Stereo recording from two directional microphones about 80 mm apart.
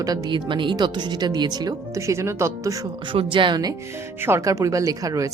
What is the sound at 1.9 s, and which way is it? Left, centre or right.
Speech, right.